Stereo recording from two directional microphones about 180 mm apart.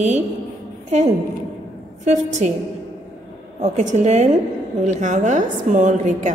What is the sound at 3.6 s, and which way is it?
A woman's voice, 40° right (ahead or behind).